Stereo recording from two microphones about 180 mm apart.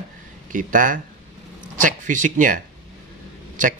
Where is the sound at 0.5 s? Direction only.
45° right (ahead or behind).